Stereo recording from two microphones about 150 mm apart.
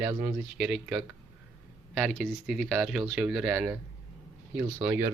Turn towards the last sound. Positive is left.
turn(degrees=-15)  # may be behind; listen again after turning